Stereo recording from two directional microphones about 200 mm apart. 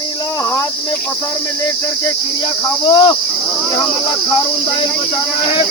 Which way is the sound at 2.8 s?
25° left (ahead or behind).